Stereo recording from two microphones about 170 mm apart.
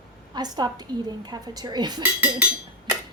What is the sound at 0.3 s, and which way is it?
Dishes, 25° right (ahead or behind).